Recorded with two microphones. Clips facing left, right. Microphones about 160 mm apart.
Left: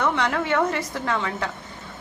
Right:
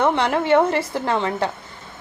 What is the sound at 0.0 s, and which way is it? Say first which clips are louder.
A woman's voice: right 4 dB; 30° right (ahead or behind).